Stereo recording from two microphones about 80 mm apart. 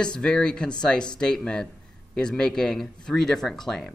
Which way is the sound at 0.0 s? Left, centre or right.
Centre.